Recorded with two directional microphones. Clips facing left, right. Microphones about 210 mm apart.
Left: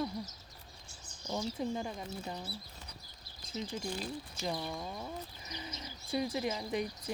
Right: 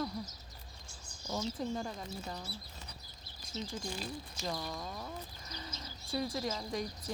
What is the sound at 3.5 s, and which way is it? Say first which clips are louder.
Speech: left 2 dB; 15° left (ahead or behind).